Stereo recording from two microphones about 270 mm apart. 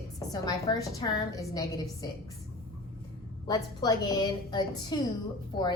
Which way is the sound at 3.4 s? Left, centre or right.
Centre.